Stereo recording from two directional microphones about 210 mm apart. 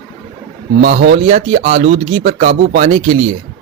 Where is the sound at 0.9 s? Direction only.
60° right (ahead or behind).